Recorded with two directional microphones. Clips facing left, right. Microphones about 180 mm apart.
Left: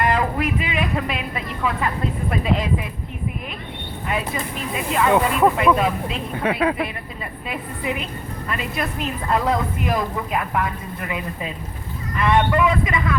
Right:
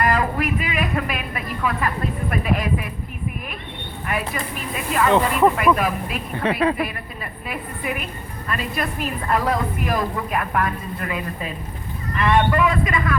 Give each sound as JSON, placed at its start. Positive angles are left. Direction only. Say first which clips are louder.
{"t": 0.0, "sound": "a woman's voice", "louder": "even", "side_deg": 25}
{"t": 4.1, "sound": "a woman's voice", "louder": "left 1 dB", "side_deg": 20}
{"t": 6.3, "sound": "speech", "louder": "right 1 dB", "side_deg": 5}
{"t": 7.4, "sound": "a woman's voice", "louder": "left 1 dB", "side_deg": 20}
{"t": 12.1, "sound": "a woman's voice", "louder": "even", "side_deg": 20}